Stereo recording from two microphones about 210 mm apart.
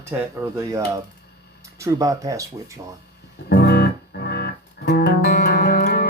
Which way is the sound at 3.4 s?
50° left (ahead or behind).